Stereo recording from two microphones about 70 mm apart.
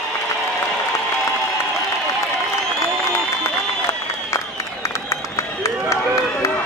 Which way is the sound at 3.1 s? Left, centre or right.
Left.